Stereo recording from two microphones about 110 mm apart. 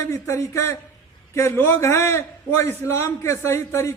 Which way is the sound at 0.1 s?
25° left (ahead or behind).